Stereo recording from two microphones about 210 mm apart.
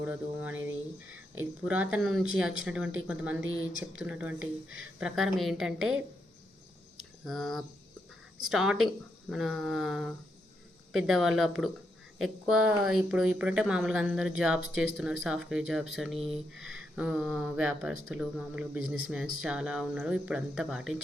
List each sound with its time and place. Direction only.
0.0 s a sound: 5° right (ahead or behind)
1.4 s speech: 5° right (ahead or behind)
4.4 s speech: 75° right (ahead or behind)
4.9 s speech: centre (ahead or behind)
7.3 s speech: centre (ahead or behind)